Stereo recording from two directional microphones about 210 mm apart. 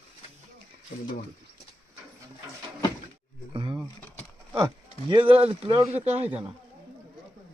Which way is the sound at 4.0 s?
5° left (ahead or behind).